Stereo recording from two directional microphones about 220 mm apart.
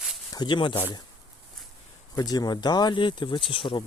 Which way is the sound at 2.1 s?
15° left (ahead or behind).